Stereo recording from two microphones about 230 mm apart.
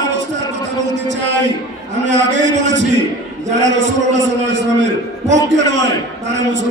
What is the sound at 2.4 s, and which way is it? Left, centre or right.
A man's voice, right.